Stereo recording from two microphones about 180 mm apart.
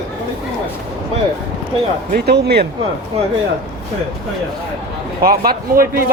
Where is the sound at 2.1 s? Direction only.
65° right (ahead or behind).